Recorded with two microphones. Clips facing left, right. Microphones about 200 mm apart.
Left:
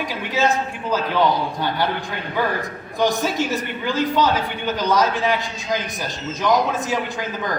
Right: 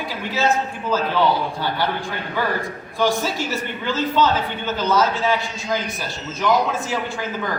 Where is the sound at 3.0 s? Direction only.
20° left (ahead or behind).